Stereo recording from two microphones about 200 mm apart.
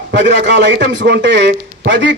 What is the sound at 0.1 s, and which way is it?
A man's voice, 60° right (ahead or behind).